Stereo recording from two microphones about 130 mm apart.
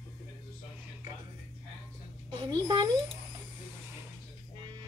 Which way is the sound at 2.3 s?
35° right (ahead or behind).